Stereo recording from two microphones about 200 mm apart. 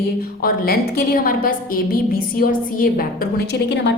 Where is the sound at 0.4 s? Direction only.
50° left (ahead or behind).